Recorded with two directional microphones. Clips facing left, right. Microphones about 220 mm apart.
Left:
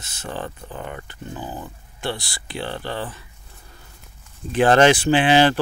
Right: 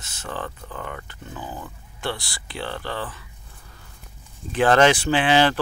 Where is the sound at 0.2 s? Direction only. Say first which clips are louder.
Left 2 dB; 25° left (ahead or behind).